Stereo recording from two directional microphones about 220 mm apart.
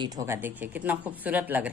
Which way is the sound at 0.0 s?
15° right (ahead or behind).